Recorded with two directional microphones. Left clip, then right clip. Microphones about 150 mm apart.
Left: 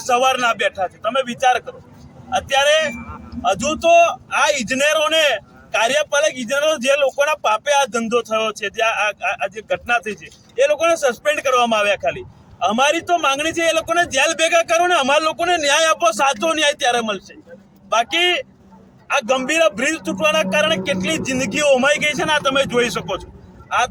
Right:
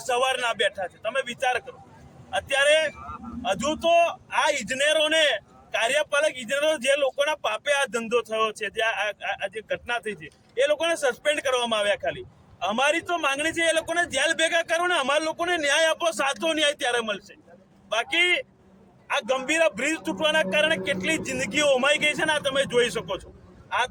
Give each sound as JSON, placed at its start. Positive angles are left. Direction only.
{"t": 0.0, "sound": "a man's voice", "side_deg": -20}